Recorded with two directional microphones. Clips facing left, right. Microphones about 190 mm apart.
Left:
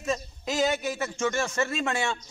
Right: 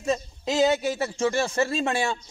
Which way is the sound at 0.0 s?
25° right (ahead or behind).